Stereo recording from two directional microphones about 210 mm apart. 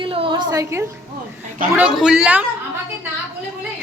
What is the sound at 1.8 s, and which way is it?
Speech, 5° right (ahead or behind).